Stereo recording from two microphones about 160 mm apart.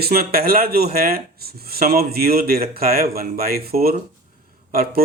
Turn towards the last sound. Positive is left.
turn(degrees=-70)  # may be behind; listen again after turning